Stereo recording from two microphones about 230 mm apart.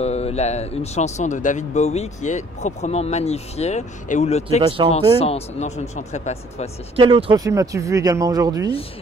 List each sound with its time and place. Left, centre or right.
0.0 s speech: left
4.6 s speech: right
5.2 s speech: left
7.0 s speech: right